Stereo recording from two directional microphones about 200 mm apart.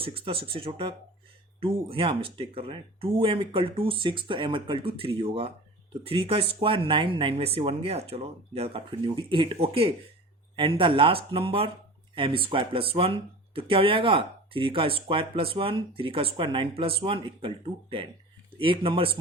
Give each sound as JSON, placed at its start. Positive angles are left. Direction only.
{"t": 0.0, "sound": "speech", "side_deg": -25}